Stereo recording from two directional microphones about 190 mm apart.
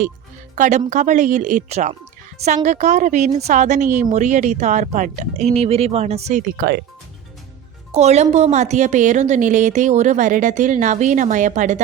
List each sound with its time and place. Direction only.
0.5 s speech: 40° right (ahead or behind)
6.6 s speech: 60° right (ahead or behind)
7.9 s speech: 35° right (ahead or behind)